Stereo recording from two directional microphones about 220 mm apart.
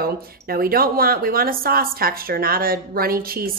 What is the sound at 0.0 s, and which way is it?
Speech, 45° right (ahead or behind).